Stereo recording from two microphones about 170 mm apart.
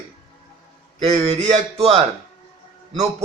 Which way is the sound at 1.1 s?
40° right (ahead or behind).